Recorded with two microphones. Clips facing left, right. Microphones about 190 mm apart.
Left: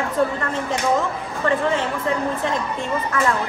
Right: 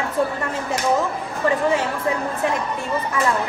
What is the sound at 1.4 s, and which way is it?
Speech, 10° right (ahead or behind).